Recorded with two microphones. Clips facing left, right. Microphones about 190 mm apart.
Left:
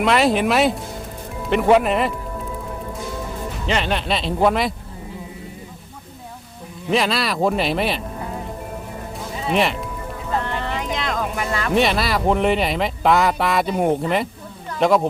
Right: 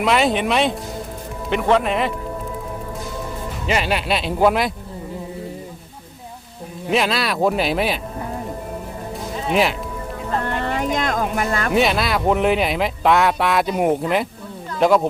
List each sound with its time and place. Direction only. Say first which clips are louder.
0.0 s speech: left 1 dB; centre (ahead or behind)
3.7 s speech: right 1 dB; 5° right (ahead or behind)
6.9 s speech: even; centre (ahead or behind)
9.5 s speech: right 1 dB; centre (ahead or behind)
10.4 s a sound: right 3 dB; 45° right (ahead or behind)
11.7 s speech: left 1 dB; centre (ahead or behind)